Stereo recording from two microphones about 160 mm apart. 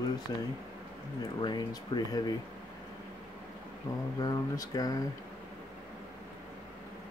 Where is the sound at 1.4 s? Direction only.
25° left (ahead or behind).